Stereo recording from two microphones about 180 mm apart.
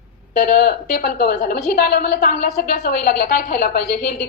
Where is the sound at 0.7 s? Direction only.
50° left (ahead or behind).